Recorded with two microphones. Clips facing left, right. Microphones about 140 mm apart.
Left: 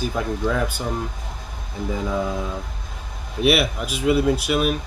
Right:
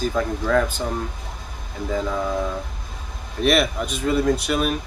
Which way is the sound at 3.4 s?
5° left (ahead or behind).